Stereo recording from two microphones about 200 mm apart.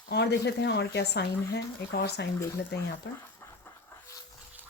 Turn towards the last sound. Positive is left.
turn(degrees=10)  # may be behind; listen again after turning